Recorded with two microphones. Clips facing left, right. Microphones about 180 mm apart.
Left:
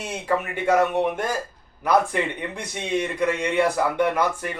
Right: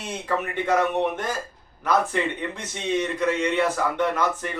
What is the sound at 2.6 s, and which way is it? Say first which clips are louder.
Speech: left 1 dB; 10° left (ahead or behind).